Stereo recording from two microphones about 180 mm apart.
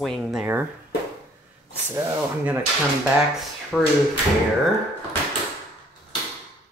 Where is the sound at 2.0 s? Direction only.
10° right (ahead or behind).